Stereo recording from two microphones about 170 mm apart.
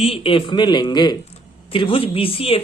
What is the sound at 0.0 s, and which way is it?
A man's voice, 35° left (ahead or behind).